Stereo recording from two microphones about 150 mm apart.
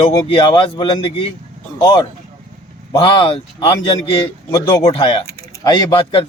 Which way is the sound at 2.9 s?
35° left (ahead or behind).